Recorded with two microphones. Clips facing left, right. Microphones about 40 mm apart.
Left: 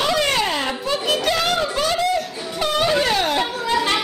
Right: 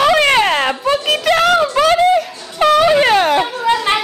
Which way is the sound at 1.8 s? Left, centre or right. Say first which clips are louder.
Right 9 dB; right.